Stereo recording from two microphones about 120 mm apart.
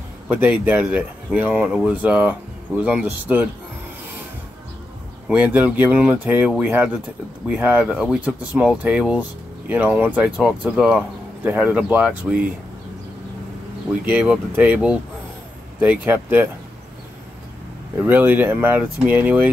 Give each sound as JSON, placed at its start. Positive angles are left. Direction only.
{"t": 0.3, "sound": "speech", "side_deg": -15}
{"t": 5.3, "sound": "speech", "side_deg": -15}
{"t": 14.0, "sound": "speech", "side_deg": -10}
{"t": 17.9, "sound": "speech", "side_deg": -15}